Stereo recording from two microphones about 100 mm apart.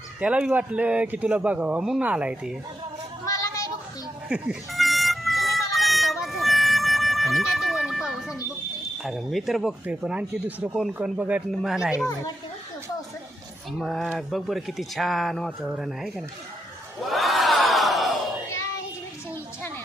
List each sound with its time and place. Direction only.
0.2 s speech: 10° right (ahead or behind)
3.2 s a sound: 35° left (ahead or behind)
4.3 s speech: 10° right (ahead or behind)
4.7 s a sound: centre (ahead or behind)
9.0 s speech: centre (ahead or behind)
9.8 s speech: 15° right (ahead or behind)
13.7 s speech: centre (ahead or behind)
17.1 s crowd: centre (ahead or behind)